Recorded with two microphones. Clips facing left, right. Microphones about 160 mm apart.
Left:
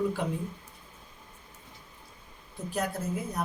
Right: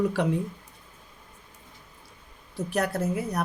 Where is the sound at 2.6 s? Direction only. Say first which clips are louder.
Right 5 dB; 75° right (ahead or behind).